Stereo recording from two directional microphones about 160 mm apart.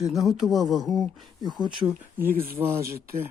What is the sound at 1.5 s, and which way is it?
Speech, 30° right (ahead or behind).